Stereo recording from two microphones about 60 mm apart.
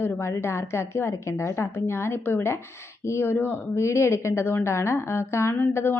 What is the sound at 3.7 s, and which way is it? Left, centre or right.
A woman's voice, left.